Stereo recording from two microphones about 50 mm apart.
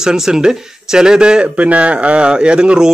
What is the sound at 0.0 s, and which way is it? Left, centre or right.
Speech, centre.